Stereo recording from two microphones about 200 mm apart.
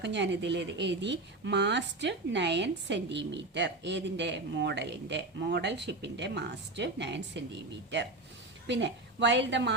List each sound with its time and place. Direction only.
0.0 s a woman's voice: 60° right (ahead or behind)
8.6 s a woman's voice: 60° right (ahead or behind)